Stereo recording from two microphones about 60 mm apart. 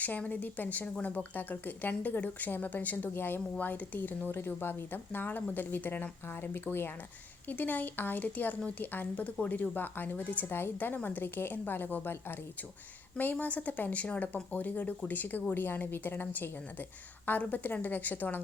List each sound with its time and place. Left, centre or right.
0.0 s speech: left
13.4 s speech: left